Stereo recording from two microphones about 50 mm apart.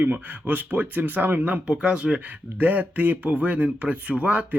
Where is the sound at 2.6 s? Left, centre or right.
Right.